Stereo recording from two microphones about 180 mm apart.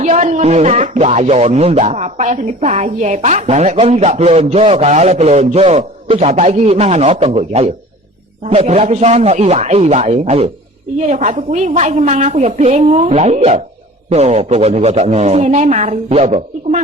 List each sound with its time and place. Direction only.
0.0 s speech: 40° right (ahead or behind)